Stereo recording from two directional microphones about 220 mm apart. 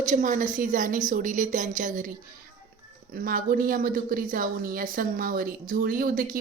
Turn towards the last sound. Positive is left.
turn(degrees=-40)  # may be behind; listen again after turning